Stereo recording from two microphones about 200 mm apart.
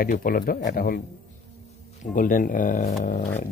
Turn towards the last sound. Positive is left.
turn(degrees=40)  # may be behind; listen again after turning